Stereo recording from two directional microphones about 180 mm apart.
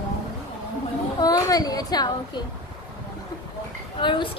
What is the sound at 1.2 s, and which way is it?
A child's voice, 20° left (ahead or behind).